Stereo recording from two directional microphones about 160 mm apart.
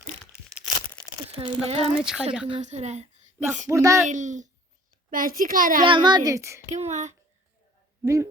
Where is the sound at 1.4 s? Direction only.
40° right (ahead or behind).